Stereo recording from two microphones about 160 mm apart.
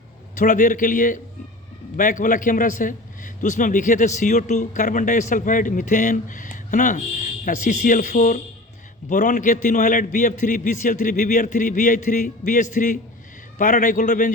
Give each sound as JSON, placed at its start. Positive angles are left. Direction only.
{"t": 0.3, "sound": "a man's voice", "side_deg": 55}